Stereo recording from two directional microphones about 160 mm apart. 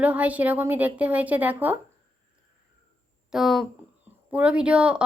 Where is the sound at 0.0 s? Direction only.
10° right (ahead or behind).